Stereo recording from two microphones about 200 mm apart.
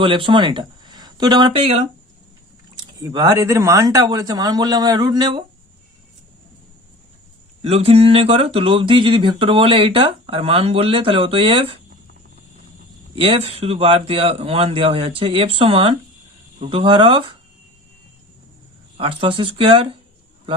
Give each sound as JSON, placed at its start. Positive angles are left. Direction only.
{"t": 0.0, "sound": "speech", "side_deg": -25}
{"t": 2.8, "sound": "speech", "side_deg": -20}
{"t": 7.6, "sound": "speech", "side_deg": -30}
{"t": 13.1, "sound": "speech", "side_deg": -30}
{"t": 18.9, "sound": "speech", "side_deg": -25}